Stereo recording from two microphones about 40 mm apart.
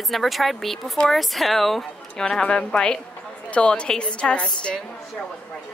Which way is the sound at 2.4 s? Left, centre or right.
Left.